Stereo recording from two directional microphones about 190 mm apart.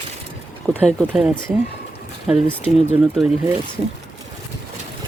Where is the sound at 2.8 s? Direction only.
30° right (ahead or behind).